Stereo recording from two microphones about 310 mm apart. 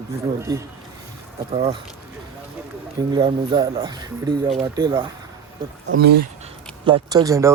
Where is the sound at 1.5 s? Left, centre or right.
Centre.